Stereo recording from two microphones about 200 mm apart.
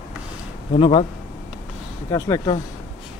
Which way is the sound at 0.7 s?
30° left (ahead or behind).